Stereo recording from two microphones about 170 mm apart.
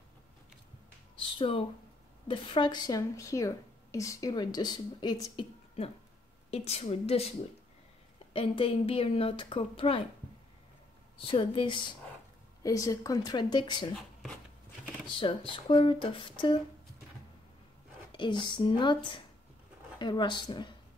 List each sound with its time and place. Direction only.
1.1 s a woman's voice: 30° left (ahead or behind)
11.1 s a woman's voice: 30° left (ahead or behind)
15.0 s a woman's voice: 30° left (ahead or behind)
18.1 s a woman's voice: 30° left (ahead or behind)